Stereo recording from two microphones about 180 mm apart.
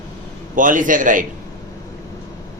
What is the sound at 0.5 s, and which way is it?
Speech, 45° right (ahead or behind).